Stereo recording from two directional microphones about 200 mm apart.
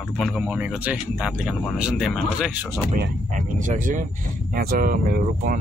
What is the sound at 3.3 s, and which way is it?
Speech, 40° right (ahead or behind).